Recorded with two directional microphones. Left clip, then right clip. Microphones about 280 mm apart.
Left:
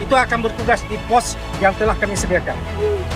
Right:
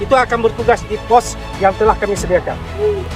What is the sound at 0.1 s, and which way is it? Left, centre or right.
Speech, right.